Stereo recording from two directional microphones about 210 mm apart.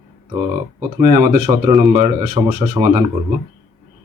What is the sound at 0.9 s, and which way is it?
Speech, 35° right (ahead or behind).